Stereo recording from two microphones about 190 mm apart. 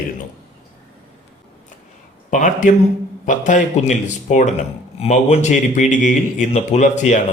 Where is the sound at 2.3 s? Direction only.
40° left (ahead or behind).